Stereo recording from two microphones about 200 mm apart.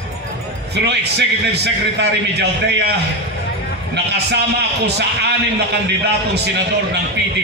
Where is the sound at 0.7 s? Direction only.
55° right (ahead or behind).